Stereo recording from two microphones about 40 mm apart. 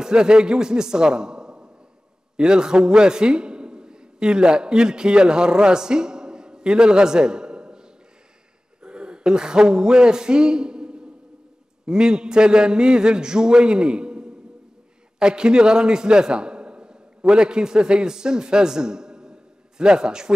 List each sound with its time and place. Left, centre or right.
0.0 s a man's voice: centre
8.8 s a man's voice: right